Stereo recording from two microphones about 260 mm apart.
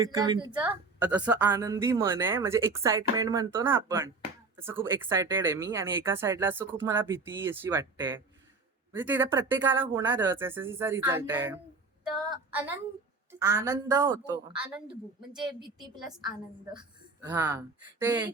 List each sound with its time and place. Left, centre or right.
0.0 s speech: centre
1.0 s a woman's voice: centre
15.4 s speech: centre
16.7 s speech: centre